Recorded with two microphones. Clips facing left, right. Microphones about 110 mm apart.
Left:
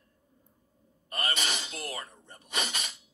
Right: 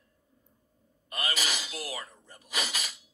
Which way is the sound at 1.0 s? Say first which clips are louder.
Left 1 dB; 35° left (ahead or behind).